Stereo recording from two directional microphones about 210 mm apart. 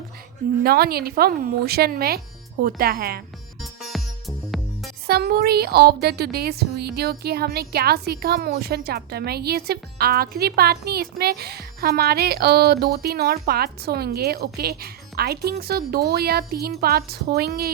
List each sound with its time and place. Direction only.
0.6 s a woman's voice: 45° right (ahead or behind)
3.6 s music: centre (ahead or behind)
5.0 s a woman's voice: 50° right (ahead or behind)